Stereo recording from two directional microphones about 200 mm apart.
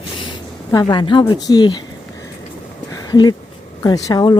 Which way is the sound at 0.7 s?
20° left (ahead or behind).